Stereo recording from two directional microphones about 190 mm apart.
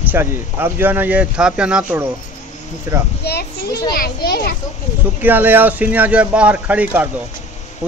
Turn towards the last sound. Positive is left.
turn(degrees=-10)  # may be behind; listen again after turning